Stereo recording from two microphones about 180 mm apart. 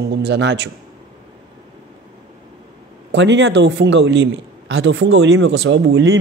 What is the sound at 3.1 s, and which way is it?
Speech, 80° right.